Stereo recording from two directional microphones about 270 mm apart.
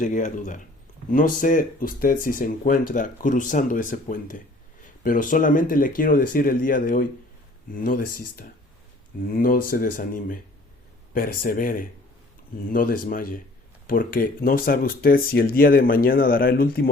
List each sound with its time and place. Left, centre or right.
0.0 s speech: left
8.0 s speech: left
9.3 s speech: left